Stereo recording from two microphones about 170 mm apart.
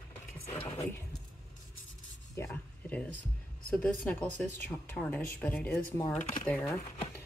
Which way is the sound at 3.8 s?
5° left (ahead or behind).